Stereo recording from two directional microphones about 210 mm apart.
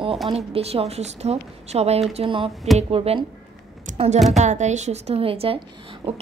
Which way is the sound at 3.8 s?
35° right (ahead or behind).